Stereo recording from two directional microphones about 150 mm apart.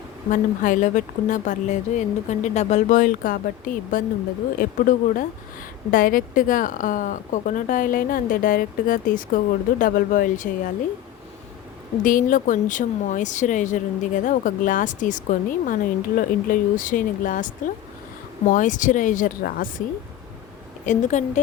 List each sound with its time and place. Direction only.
0.3 s a woman's voice: 60° left (ahead or behind)
12.0 s a woman's voice: 65° left (ahead or behind)
20.8 s a woman's voice: 55° left (ahead or behind)